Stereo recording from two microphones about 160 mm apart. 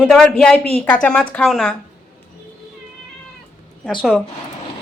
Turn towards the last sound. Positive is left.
turn(degrees=-5)  # may be behind; listen again after turning